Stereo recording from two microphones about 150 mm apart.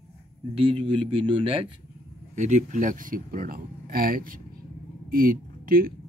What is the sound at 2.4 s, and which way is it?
Speech, 55° right (ahead or behind).